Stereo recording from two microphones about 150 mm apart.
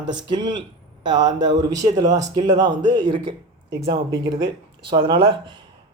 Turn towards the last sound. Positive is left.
turn(degrees=-30)  # may be behind; listen again after turning